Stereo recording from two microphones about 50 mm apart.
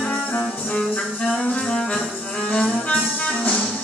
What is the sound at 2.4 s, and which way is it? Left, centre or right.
Music, left.